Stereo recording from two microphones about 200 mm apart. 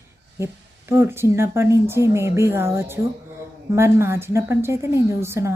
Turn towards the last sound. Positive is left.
turn(degrees=-15)  # may be behind; listen again after turning